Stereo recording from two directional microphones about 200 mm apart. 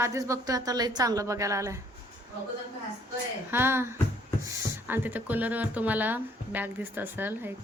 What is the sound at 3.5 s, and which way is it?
Speech, 10° right (ahead or behind).